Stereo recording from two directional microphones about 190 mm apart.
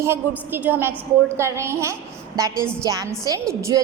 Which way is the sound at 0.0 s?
10° right (ahead or behind).